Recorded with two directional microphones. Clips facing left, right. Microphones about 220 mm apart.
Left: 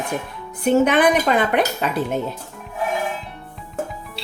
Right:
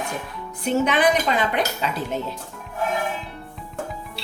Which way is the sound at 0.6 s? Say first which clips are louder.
Left 4 dB; 55° left (ahead or behind).